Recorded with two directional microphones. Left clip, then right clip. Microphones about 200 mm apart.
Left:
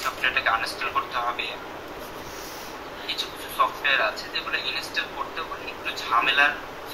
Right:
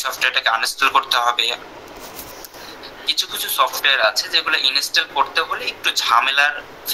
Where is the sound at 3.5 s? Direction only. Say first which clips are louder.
Right 5 dB; 50° right (ahead or behind).